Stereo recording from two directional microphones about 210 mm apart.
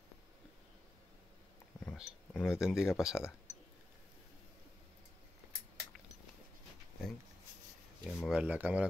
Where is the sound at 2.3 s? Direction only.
5° left (ahead or behind).